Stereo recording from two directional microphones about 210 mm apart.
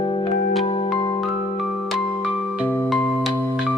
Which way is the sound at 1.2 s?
Centre (ahead or behind).